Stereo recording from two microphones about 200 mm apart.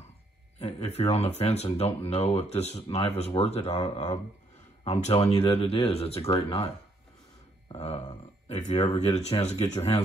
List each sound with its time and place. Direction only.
0.6 s speech: 30° left (ahead or behind)
7.7 s speech: 30° left (ahead or behind)